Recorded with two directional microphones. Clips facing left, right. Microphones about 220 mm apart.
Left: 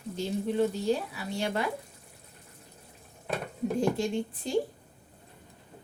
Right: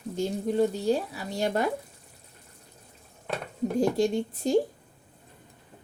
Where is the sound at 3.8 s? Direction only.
40° right (ahead or behind).